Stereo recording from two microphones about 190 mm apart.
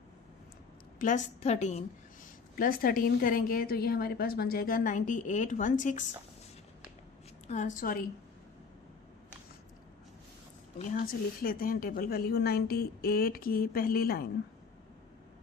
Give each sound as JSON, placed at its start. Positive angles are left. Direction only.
{"t": 0.9, "sound": "a woman's voice", "side_deg": 40}
{"t": 2.6, "sound": "a woman's voice", "side_deg": 50}
{"t": 7.4, "sound": "a woman's voice", "side_deg": 40}
{"t": 10.9, "sound": "a woman's voice", "side_deg": 50}